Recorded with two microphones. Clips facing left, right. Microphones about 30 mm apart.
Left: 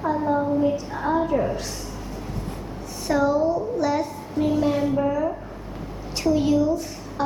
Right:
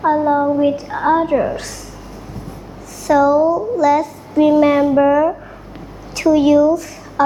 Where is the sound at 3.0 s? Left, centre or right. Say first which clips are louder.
Right 8 dB; right.